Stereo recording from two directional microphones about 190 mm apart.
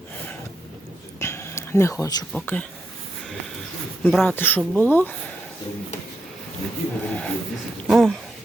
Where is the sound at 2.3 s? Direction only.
10° left (ahead or behind).